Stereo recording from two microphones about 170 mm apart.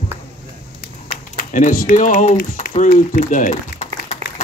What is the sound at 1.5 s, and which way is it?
Speech, 55° left (ahead or behind).